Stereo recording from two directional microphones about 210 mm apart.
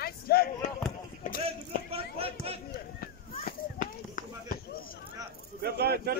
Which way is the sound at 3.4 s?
40° left (ahead or behind).